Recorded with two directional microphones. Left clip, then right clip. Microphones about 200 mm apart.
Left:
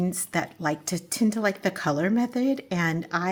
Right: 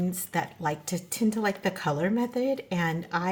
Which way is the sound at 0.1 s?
40° left (ahead or behind).